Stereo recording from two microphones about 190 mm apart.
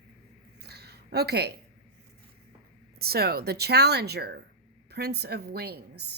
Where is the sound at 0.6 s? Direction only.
60° right (ahead or behind).